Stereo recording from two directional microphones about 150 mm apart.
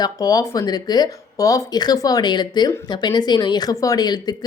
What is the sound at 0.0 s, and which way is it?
Speech, 25° left (ahead or behind).